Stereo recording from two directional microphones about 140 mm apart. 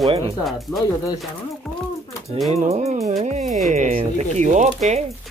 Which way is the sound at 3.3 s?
55° right (ahead or behind).